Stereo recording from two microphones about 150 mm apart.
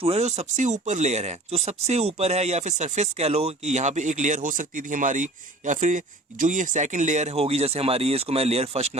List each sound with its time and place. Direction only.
0.0 s speech: 45° right (ahead or behind)